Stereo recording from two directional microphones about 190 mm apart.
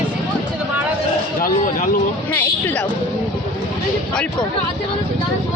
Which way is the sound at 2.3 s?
10° left (ahead or behind).